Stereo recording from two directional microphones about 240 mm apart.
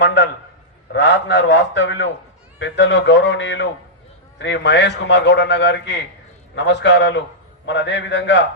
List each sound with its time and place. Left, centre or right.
0.0 s a man's voice: left